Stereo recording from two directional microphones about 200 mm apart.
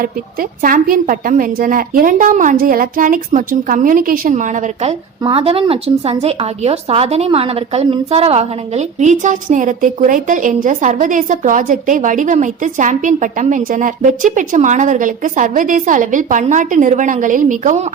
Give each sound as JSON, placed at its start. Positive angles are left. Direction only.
{"t": 0.0, "sound": "a woman's voice", "side_deg": -45}